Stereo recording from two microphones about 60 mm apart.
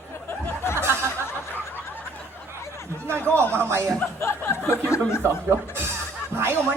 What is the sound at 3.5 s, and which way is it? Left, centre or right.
Speech, right.